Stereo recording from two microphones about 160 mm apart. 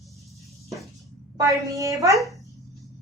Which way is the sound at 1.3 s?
20° right (ahead or behind).